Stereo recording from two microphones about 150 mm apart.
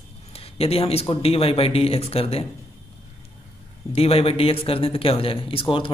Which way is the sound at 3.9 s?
40° left (ahead or behind).